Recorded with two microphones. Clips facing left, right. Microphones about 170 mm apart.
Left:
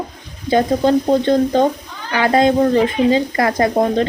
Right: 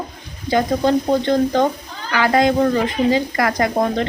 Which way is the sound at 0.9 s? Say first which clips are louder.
Left 3 dB; 20° left (ahead or behind).